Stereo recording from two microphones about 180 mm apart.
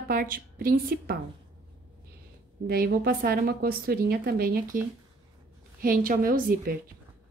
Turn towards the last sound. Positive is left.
turn(degrees=-55)  # may be behind; listen again after turning